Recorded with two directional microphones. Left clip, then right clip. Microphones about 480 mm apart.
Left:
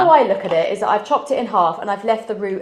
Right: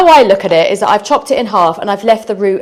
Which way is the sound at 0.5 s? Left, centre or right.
Right.